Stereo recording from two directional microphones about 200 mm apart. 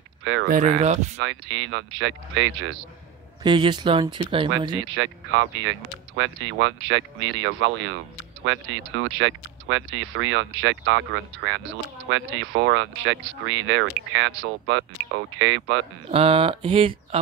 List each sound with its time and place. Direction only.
0.2 s speech: 75° right (ahead or behind)
0.5 s speech: 35° right (ahead or behind)
1.2 s speech: 80° right
3.4 s speech: 25° right (ahead or behind)
4.9 s speech: 70° right (ahead or behind)
16.1 s speech: 30° right (ahead or behind)